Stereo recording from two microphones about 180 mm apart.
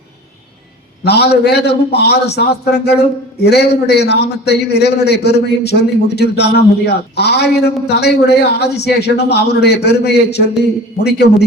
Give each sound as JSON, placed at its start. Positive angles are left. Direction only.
{"t": 1.0, "sound": "a man's voice", "side_deg": 65}